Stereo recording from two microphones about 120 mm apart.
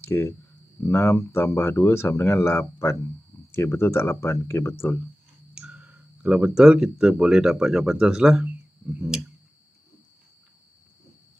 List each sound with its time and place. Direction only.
0.0 s speech: 20° left (ahead or behind)
5.5 s speech: 10° right (ahead or behind)